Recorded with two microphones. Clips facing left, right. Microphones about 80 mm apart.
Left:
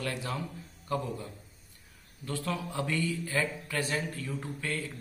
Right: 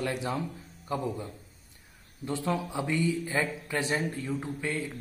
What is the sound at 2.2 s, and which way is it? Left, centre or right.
A man's voice, right.